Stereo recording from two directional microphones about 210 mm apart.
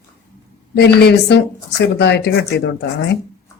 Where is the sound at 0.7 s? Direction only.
50° left (ahead or behind).